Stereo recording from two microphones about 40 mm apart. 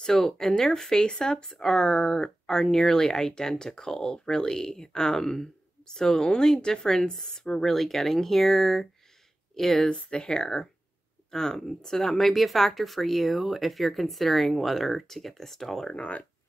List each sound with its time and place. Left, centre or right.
0.0 s speech: centre
7.7 s speech: centre
15.9 s speech: left